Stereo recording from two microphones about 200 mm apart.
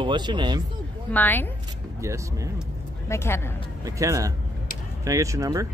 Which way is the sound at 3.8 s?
15° right (ahead or behind).